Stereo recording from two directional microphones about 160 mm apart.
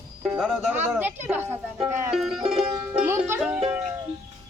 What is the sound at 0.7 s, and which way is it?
A child's voice, 10° right (ahead or behind).